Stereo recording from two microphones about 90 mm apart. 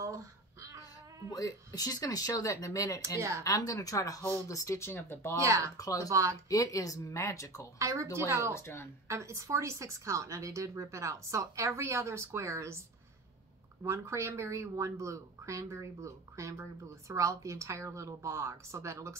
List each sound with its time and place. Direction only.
0.0 s a sound: 35° right (ahead or behind)
1.3 s speech: 40° left (ahead or behind)
3.2 s a woman's voice: 30° right (ahead or behind)
3.4 s speech: 40° left (ahead or behind); by 5.3 s 25° left (ahead or behind)
5.4 s a woman's voice: 35° right (ahead or behind)
5.8 s speech: 40° left (ahead or behind)
6.0 s a woman's voice: 35° right (ahead or behind)
6.5 s speech: 40° left (ahead or behind)
7.8 s a woman's voice: 30° right (ahead or behind)
8.5 s speech: 30° left (ahead or behind)
9.0 s a woman's voice: 30° right (ahead or behind)
13.8 s a woman's voice: 30° right (ahead or behind)